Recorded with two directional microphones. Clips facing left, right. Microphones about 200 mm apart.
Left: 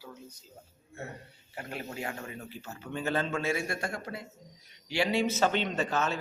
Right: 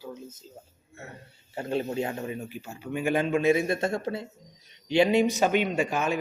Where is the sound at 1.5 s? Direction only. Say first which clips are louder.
Right 10 dB; 25° right (ahead or behind).